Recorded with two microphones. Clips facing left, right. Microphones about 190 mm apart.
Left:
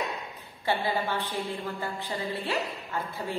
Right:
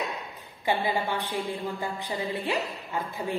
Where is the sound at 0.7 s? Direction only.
15° right (ahead or behind).